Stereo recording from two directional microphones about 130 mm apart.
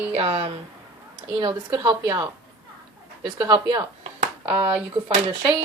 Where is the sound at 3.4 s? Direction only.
35° right (ahead or behind).